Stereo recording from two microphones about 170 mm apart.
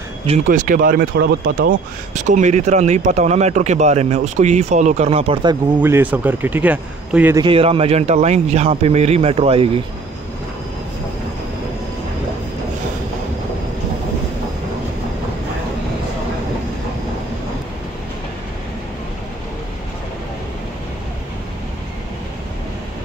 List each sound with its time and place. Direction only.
0.5 s speech: 55° right (ahead or behind); by 1.8 s 70° right (ahead or behind)
2.1 s speech: 45° right (ahead or behind); by 5.6 s 30° right (ahead or behind)
5.8 s a man's voice: 10° right (ahead or behind)
7.3 s a man's voice: 30° right (ahead or behind)